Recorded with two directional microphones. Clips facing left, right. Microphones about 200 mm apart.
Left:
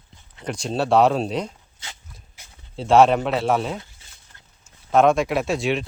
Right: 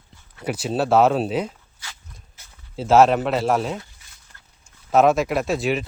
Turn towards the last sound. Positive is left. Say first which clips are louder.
# even
turn(degrees=0)  # may be behind; listen again after turning